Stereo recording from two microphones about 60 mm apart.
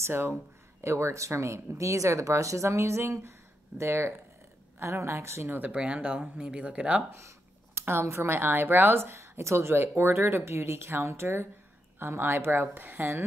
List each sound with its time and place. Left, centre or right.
0.0 s a woman's voice: right
5.6 s speech: centre
7.2 s a sound: right
7.8 s speech: right